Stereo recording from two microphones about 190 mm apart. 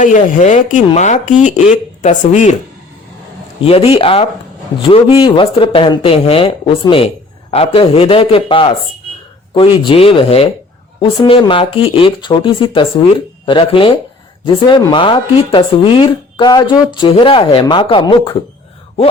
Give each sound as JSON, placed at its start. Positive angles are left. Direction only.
{"t": 0.0, "sound": "speech", "side_deg": 40}
{"t": 3.6, "sound": "speech", "side_deg": 30}